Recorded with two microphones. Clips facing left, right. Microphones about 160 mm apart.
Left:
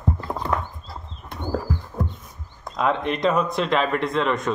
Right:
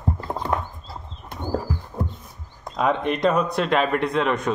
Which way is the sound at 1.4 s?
10° right (ahead or behind).